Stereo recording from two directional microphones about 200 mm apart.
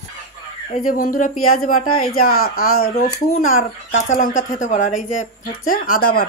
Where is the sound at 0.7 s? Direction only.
45° left (ahead or behind).